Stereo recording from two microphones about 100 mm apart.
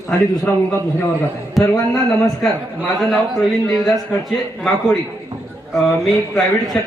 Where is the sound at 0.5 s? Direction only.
15° left (ahead or behind).